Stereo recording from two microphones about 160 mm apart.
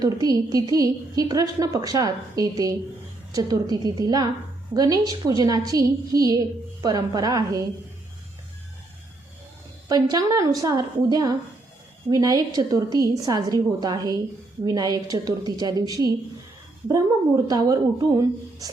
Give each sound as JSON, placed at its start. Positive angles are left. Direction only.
{"t": 0.0, "sound": "a woman's voice", "side_deg": -25}
{"t": 9.9, "sound": "a woman's voice", "side_deg": -25}